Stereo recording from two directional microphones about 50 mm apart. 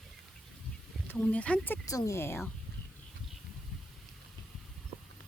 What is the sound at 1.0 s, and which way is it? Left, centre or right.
Speech, left.